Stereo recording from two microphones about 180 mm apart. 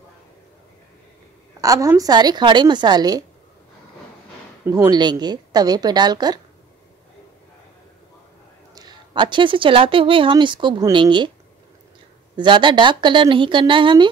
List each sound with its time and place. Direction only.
1.6 s speech: 20° right (ahead or behind)
4.6 s speech: 20° right (ahead or behind)
8.7 s speech: 25° right (ahead or behind)
12.4 s speech: 25° right (ahead or behind)